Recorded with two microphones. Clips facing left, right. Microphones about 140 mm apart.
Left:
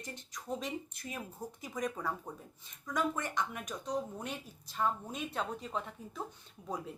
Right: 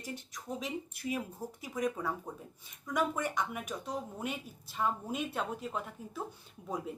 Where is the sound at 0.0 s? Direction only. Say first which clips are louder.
Right 3 dB; 5° right (ahead or behind).